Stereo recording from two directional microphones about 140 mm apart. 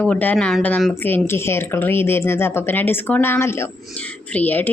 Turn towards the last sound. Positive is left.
turn(degrees=15)  # may be behind; listen again after turning